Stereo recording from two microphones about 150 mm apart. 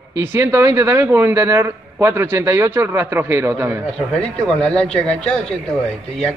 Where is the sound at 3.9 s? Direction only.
5° left (ahead or behind).